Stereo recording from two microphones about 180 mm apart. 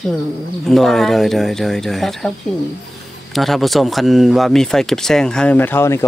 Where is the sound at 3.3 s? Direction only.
Centre (ahead or behind).